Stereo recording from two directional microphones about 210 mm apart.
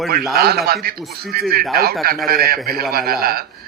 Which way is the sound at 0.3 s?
45° right (ahead or behind).